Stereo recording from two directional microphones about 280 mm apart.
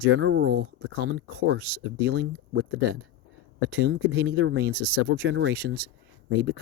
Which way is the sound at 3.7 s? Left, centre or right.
Right.